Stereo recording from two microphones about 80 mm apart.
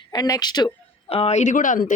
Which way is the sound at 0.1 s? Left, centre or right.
Left.